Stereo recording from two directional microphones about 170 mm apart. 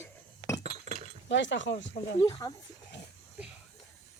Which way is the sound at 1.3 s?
90° left.